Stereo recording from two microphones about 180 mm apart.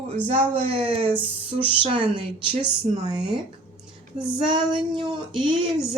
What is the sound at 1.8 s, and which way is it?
Female singing, 25° right (ahead or behind).